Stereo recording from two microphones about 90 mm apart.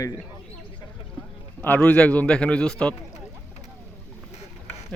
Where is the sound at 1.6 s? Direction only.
15° left (ahead or behind).